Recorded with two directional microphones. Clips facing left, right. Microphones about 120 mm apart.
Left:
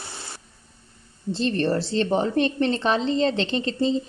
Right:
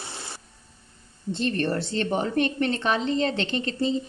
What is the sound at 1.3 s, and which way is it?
A woman's voice, 30° left (ahead or behind).